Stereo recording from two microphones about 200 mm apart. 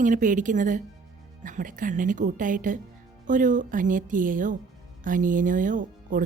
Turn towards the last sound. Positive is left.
turn(degrees=-40)  # may be behind; listen again after turning